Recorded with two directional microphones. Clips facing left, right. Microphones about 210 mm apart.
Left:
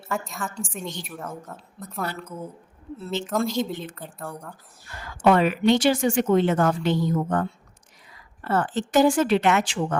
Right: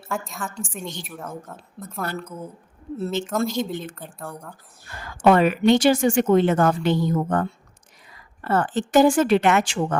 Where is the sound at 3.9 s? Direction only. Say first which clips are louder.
Even; centre (ahead or behind).